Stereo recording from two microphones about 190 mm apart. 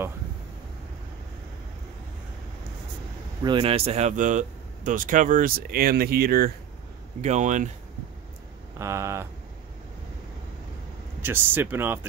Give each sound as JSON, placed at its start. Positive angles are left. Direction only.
{"t": 3.4, "sound": "speech", "side_deg": -25}
{"t": 7.2, "sound": "speech", "side_deg": -40}
{"t": 8.7, "sound": "a sound", "side_deg": -15}
{"t": 11.2, "sound": "speech", "side_deg": -10}